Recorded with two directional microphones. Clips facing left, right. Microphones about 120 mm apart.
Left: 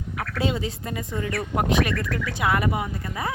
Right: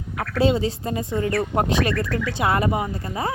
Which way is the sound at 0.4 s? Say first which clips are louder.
Right 7 dB; 30° right (ahead or behind).